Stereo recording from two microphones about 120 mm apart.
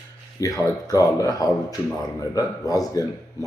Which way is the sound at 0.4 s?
30° left (ahead or behind).